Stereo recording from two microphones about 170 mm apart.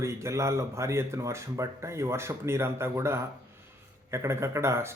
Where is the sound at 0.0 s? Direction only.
15° right (ahead or behind).